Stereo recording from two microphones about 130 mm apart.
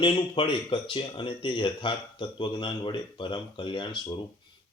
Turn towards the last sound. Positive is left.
turn(degrees=35)  # may be behind; listen again after turning